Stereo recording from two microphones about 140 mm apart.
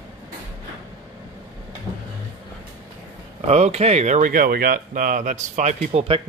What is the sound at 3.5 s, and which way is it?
Speech, 50° right (ahead or behind).